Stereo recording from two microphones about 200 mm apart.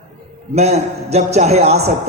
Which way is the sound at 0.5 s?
35° right (ahead or behind).